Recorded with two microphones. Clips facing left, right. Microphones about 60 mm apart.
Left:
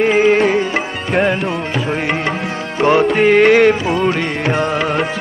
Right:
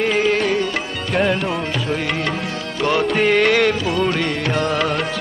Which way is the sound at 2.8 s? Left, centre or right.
Left.